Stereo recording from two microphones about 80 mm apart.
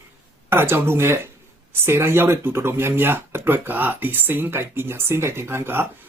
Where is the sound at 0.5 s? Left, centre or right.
Right.